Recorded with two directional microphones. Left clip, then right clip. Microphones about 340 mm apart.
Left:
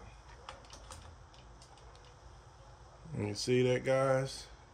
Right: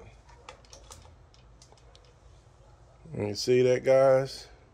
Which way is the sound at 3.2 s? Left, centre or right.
Centre.